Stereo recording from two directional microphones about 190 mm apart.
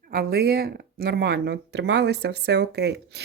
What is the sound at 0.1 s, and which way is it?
Speech, 55° right (ahead or behind).